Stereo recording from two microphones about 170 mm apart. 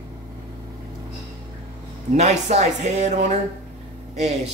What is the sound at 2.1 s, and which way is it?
A man's voice, 40° right (ahead or behind).